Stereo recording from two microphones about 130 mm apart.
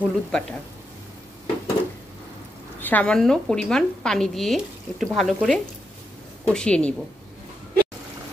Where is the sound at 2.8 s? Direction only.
15° left (ahead or behind).